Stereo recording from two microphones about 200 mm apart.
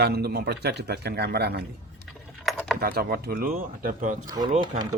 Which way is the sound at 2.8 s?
50° right (ahead or behind).